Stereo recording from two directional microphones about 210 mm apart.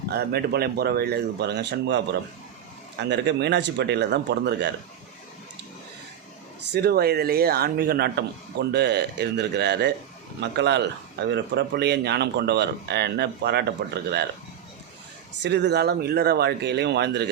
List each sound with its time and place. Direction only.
0.1 s speech: 50° right (ahead or behind)
3.0 s speech: 55° right (ahead or behind)
6.7 s speech: 50° right (ahead or behind)
15.4 s speech: 55° right (ahead or behind)